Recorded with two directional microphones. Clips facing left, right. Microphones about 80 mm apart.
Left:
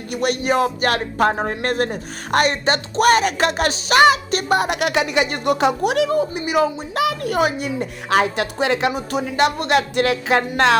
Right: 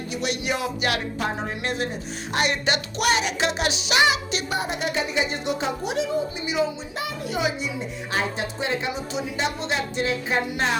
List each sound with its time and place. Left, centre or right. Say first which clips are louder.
0.1 s speech: left 8 dB; left
2.5 s a sound: left 4 dB; left
8.9 s a woman's voice: left 5 dB; left